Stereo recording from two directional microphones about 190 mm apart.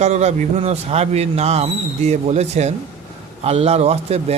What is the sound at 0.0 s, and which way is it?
Speech, 35° right (ahead or behind).